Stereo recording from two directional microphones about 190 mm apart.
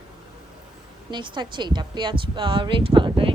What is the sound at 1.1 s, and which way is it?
A woman's voice, 25° right (ahead or behind).